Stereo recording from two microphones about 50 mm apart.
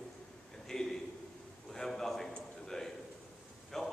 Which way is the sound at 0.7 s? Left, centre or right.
Centre.